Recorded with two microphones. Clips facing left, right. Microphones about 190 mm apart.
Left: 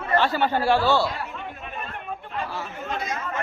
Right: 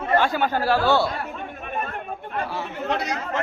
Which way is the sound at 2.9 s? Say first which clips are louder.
Right 4 dB; 75° right (ahead or behind).